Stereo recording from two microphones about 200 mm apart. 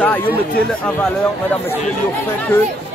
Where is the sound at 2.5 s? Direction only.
10° left (ahead or behind).